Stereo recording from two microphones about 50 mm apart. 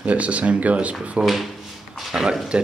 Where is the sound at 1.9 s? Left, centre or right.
Centre.